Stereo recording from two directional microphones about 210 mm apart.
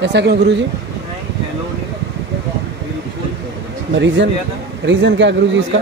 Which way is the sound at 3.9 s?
55° right (ahead or behind).